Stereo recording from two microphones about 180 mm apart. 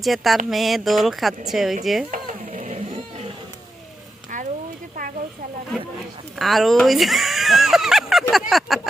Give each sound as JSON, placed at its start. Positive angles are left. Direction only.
{"t": 0.0, "sound": "speech", "side_deg": 0}
{"t": 2.0, "sound": "cat", "side_deg": -45}
{"t": 6.4, "sound": "speech", "side_deg": 0}
{"t": 8.3, "sound": "a sound", "side_deg": 0}